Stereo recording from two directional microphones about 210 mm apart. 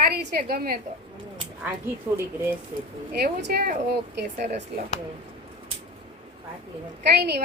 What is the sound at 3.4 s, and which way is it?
Speech, 50° right (ahead or behind).